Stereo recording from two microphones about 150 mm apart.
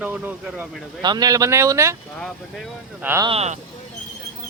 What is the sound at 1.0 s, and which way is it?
Speech, 25° right (ahead or behind).